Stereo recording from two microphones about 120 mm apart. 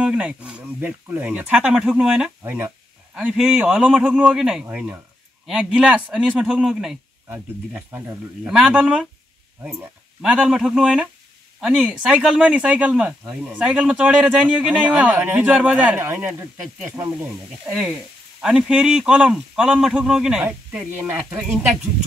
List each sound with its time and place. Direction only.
0.0 s speech: 10° right (ahead or behind)
4.6 s speech: 15° right (ahead or behind)
5.5 s speech: 5° right (ahead or behind)
7.2 s speech: 15° right (ahead or behind)
8.5 s speech: 5° right (ahead or behind)
10.2 s speech: 5° right (ahead or behind)
18.4 s speech: 5° right (ahead or behind)
20.4 s speech: 20° right (ahead or behind)